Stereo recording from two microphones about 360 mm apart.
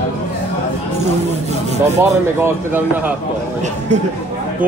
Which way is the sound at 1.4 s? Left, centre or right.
Centre.